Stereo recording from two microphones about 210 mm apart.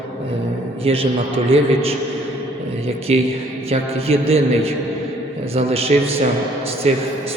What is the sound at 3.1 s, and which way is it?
A man's voice, 30° right (ahead or behind).